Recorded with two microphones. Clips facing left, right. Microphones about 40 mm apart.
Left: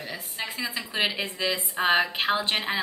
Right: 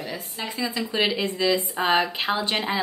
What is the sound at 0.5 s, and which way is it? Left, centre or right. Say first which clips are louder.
Speech: right 4 dB; centre.